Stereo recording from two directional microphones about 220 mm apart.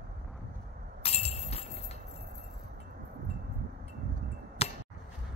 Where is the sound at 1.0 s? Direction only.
30° left (ahead or behind).